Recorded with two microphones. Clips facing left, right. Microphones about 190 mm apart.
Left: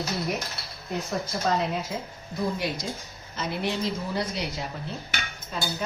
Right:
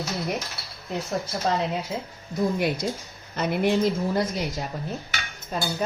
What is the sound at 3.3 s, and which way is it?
Speech, 55° right (ahead or behind).